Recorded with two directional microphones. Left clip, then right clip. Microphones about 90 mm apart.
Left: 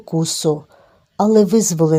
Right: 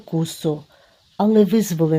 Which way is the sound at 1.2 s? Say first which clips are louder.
Left 3 dB; 35° left (ahead or behind).